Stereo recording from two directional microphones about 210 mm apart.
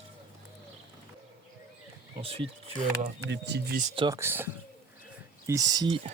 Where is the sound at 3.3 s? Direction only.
50° right (ahead or behind).